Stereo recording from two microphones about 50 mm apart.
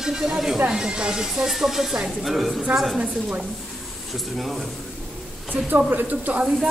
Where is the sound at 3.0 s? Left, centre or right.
Right.